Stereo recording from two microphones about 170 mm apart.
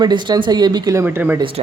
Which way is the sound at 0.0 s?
25° right (ahead or behind).